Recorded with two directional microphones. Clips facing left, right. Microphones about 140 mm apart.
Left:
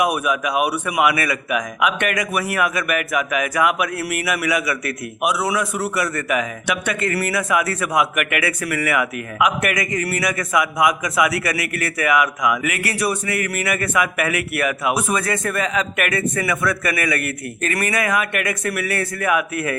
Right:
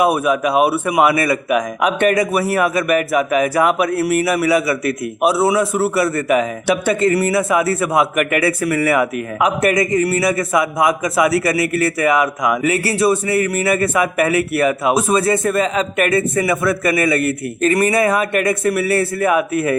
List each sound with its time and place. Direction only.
0.0 s a man's voice: 30° right (ahead or behind)